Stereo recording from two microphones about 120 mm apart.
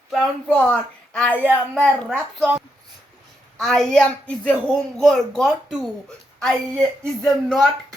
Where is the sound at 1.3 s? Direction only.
15° right (ahead or behind).